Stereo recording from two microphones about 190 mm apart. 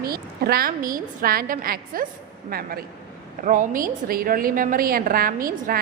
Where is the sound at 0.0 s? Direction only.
50° right (ahead or behind).